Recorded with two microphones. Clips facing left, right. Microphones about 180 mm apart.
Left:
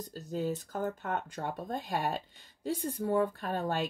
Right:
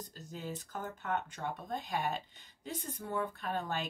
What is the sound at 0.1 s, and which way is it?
Speech, 40° left (ahead or behind).